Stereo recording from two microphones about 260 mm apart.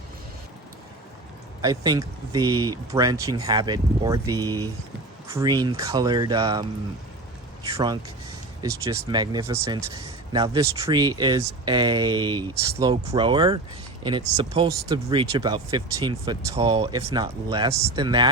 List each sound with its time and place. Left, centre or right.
1.6 s speech: centre
7.7 s speech: centre